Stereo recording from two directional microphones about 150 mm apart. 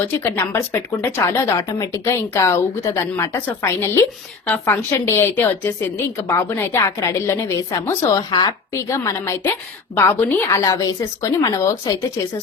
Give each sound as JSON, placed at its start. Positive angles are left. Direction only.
{"t": 0.0, "sound": "a woman's voice", "side_deg": 15}
{"t": 10.6, "sound": "a woman's voice", "side_deg": 25}